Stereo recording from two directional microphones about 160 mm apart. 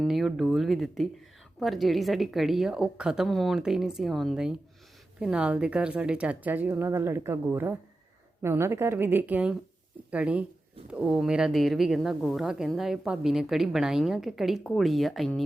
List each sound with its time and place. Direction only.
0.0 s speech: centre (ahead or behind)